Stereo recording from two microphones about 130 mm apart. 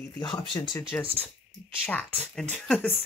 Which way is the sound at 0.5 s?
30° left (ahead or behind).